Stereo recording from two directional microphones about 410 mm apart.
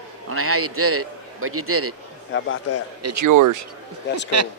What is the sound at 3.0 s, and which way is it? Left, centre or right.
Speech, right.